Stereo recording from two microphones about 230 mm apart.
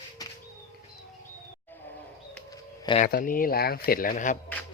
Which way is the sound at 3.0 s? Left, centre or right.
Left.